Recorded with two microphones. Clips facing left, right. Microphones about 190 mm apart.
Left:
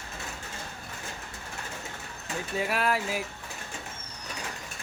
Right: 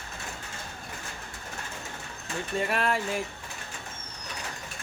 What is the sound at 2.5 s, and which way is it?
Speech, 5° left (ahead or behind).